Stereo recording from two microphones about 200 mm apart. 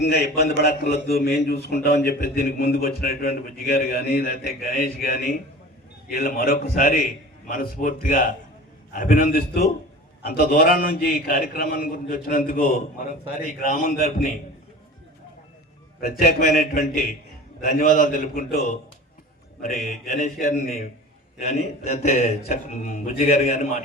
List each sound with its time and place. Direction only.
0.0 s a man's voice: 50° left (ahead or behind)
16.0 s a man's voice: 50° left (ahead or behind)
19.6 s a man's voice: 35° left (ahead or behind)